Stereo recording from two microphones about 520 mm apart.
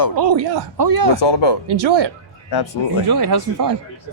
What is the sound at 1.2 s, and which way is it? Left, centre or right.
Speech, left.